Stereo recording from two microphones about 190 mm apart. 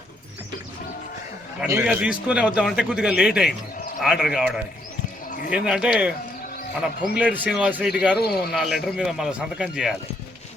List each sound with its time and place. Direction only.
1.6 s a man's voice: 10° right (ahead or behind)
5.6 s a man's voice: 5° right (ahead or behind)
8.2 s a man's voice: 55° left (ahead or behind)
8.5 s a man's voice: centre (ahead or behind)